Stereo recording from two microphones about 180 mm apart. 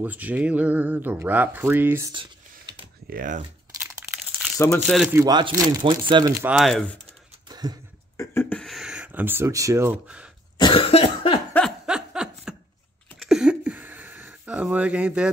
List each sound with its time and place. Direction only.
0.0 s speech: 10° right (ahead or behind)
3.1 s speech: 50° right (ahead or behind)
4.8 s speech: centre (ahead or behind)
5.1 s speech: 20° right (ahead or behind)
6.4 s speech: centre (ahead or behind)
7.4 s a sound: 20° right (ahead or behind)
8.2 s speech: 15° left (ahead or behind); by 10.3 s 5° right (ahead or behind)
10.6 s cough: 30° left (ahead or behind)
11.5 s a sound: centre (ahead or behind)